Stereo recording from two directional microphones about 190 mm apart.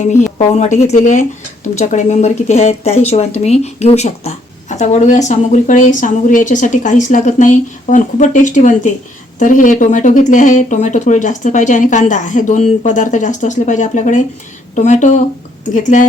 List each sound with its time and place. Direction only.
0.0 s a woman's voice: 40° left (ahead or behind)